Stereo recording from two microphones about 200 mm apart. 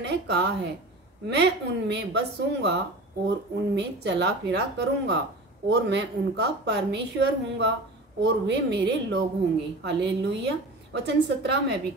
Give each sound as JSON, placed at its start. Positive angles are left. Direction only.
{"t": 0.0, "sound": "a woman's voice", "side_deg": -60}